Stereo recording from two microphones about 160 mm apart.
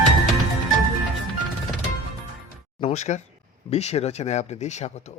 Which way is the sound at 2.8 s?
45° left (ahead or behind).